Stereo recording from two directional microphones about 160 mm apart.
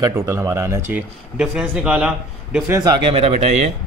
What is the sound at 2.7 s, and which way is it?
Speech, 25° right (ahead or behind).